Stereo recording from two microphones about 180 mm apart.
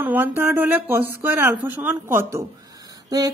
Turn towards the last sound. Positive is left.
turn(degrees=-20)  # may be behind; listen again after turning